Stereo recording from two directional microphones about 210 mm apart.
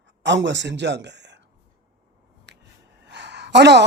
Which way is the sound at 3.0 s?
55° right (ahead or behind).